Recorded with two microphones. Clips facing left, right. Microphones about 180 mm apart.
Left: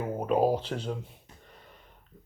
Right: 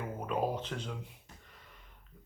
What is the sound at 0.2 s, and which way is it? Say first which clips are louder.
Speech: left 9 dB; 35° left (ahead or behind).